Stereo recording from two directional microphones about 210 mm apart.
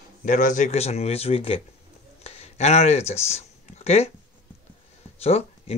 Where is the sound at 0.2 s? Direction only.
35° left (ahead or behind).